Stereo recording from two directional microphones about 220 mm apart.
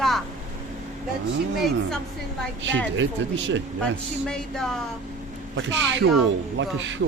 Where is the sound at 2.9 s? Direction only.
60° right (ahead or behind).